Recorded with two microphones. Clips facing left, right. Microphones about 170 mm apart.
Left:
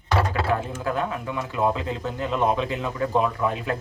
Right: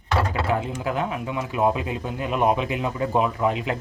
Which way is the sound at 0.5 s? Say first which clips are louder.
Right 2 dB; 15° right (ahead or behind).